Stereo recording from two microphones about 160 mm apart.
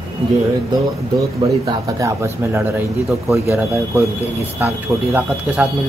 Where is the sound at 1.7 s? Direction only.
20° right (ahead or behind).